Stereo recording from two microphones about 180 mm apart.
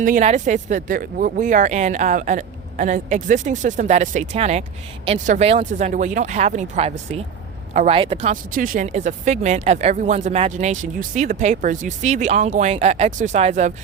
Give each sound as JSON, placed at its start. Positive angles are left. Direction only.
{"t": 0.0, "sound": "speech", "side_deg": -45}
{"t": 8.3, "sound": "speech", "side_deg": -50}